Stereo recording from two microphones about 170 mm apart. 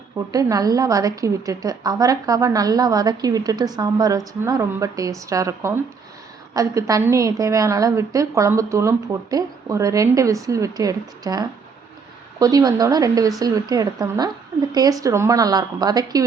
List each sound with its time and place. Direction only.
0.3 s a woman's voice: 20° right (ahead or behind)